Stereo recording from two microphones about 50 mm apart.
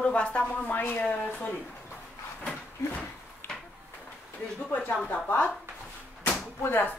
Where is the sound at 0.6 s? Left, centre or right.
Left.